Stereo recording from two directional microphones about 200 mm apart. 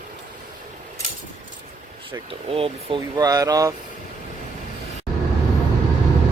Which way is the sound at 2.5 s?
25° right (ahead or behind).